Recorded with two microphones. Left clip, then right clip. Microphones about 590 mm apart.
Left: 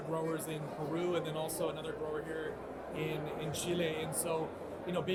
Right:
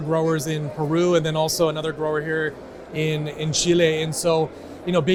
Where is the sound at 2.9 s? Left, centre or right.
Right.